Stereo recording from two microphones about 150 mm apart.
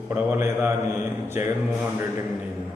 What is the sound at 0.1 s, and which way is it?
Mantra, 15° right (ahead or behind).